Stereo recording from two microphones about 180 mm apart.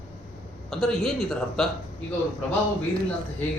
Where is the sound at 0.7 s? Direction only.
Centre (ahead or behind).